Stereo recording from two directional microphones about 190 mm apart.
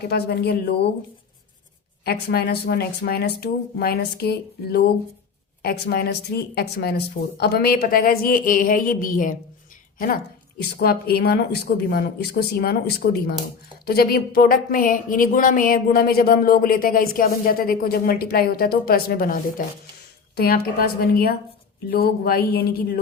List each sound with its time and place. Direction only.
0.1 s speech: 55° left (ahead or behind)
2.0 s speech: 55° left (ahead or behind)
10.6 s speech: 55° left (ahead or behind)